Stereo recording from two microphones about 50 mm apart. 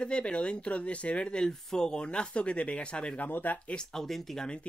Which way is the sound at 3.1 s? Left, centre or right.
Left.